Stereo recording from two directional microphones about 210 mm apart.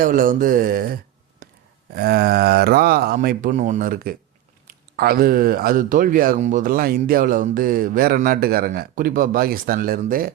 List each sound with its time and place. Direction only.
0.0 s mantra: 40° right (ahead or behind)
1.9 s speech: 45° right (ahead or behind)